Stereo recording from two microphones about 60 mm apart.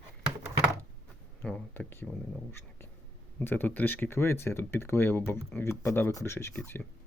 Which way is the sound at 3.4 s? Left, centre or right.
Left.